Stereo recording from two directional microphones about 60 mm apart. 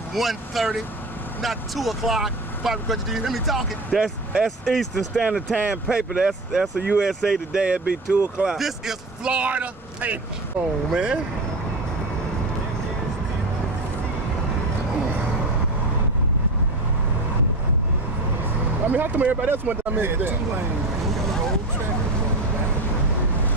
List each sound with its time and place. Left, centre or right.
0.1 s speech: centre
5.1 s speech: centre
8.5 s speech: centre
9.2 s speech: right
10.9 s speech: centre
18.9 s speech: right